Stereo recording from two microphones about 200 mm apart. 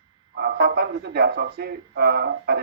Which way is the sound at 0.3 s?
55° right (ahead or behind).